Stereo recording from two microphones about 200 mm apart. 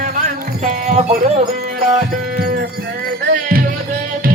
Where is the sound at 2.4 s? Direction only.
50° right (ahead or behind).